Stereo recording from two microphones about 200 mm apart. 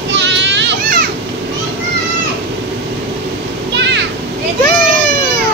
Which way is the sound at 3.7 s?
60° right (ahead or behind).